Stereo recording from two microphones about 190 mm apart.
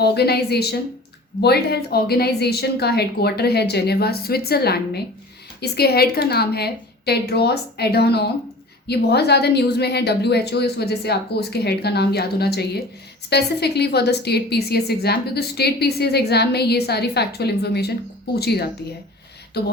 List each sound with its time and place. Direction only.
0.0 s a woman's voice: 60° left (ahead or behind)